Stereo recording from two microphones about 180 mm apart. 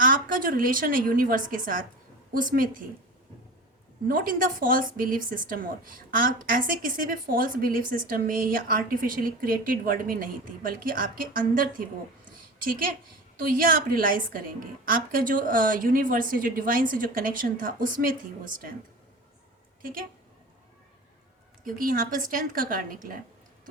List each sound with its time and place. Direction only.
0.0 s a woman's voice: 50° right (ahead or behind)
4.1 s speech: 50° right (ahead or behind)
13.4 s speech: 50° right (ahead or behind)
19.8 s a woman's voice: 50° right (ahead or behind)
21.6 s speech: 50° right (ahead or behind)